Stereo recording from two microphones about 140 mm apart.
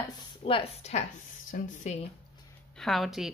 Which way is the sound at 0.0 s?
40° left (ahead or behind).